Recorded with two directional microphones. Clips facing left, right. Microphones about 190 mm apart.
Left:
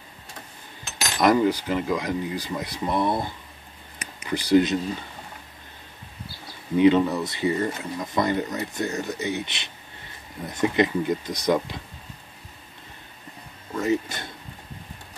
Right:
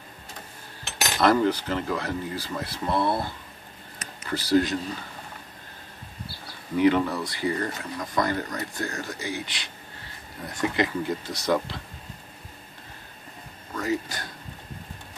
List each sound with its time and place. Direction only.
1.2 s speech: 10° left (ahead or behind)
4.0 s a sound: 15° left (ahead or behind)
6.8 s speech: 20° left (ahead or behind)
13.7 s speech: 20° left (ahead or behind)